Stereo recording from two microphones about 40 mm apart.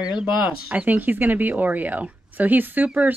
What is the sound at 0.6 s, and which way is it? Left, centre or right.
Speech, right.